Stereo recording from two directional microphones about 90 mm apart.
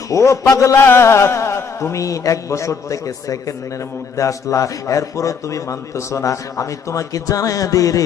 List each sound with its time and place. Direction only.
0.1 s a man's voice: 35° left (ahead or behind)
0.8 s a man's voice: 25° left (ahead or behind)